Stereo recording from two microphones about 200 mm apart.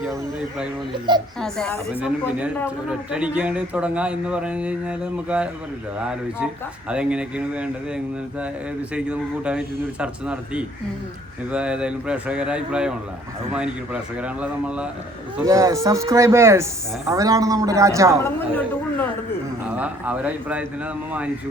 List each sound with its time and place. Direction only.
1.4 s speech: centre (ahead or behind)
15.4 s speech: 15° right (ahead or behind)
18.2 s a woman's voice: 10° left (ahead or behind)
19.6 s speech: 5° right (ahead or behind)